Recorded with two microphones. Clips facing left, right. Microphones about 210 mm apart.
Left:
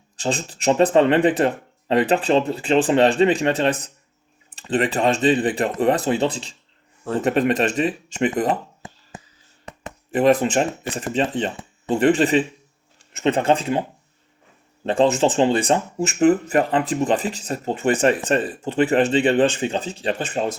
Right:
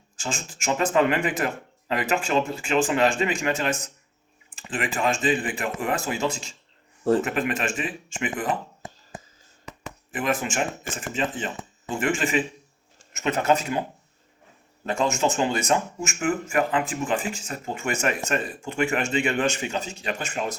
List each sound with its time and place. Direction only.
0.2 s speech: 35° left (ahead or behind)
10.1 s speech: 35° left (ahead or behind)
14.8 s speech: 30° left (ahead or behind)